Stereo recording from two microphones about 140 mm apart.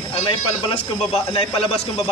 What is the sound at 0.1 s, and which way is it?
A man's voice, 40° left (ahead or behind).